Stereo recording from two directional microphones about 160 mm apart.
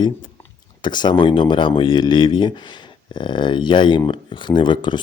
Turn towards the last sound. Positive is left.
turn(degrees=30)  # may be behind; listen again after turning